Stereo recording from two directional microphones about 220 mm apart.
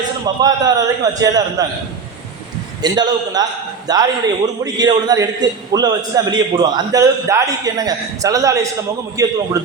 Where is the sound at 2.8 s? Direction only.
20° right (ahead or behind).